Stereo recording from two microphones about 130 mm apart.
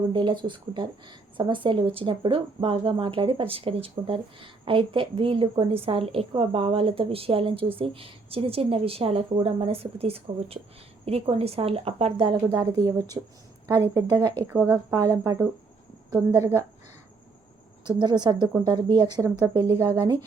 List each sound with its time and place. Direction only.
0.1 s speech: 35° right (ahead or behind); by 12.3 s 50° right (ahead or behind)
12.5 s speech: 30° right (ahead or behind)
14.4 s speech: 20° right (ahead or behind)
17.8 s speech: 35° right (ahead or behind)